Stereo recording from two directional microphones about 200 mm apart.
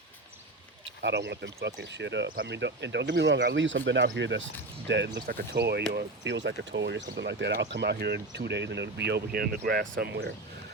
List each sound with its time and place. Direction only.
0.9 s speech: 60° right (ahead or behind)
9.8 s speech: 65° right (ahead or behind)